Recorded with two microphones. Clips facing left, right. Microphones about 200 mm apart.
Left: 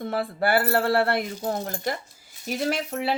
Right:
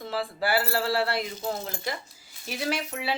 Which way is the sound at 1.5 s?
55° left (ahead or behind).